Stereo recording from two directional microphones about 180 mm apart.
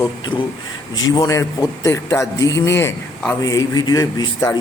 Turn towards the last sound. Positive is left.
turn(degrees=20)  # may be behind; listen again after turning